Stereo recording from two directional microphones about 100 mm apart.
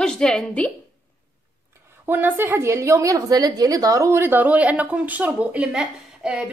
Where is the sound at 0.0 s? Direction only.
5° left (ahead or behind).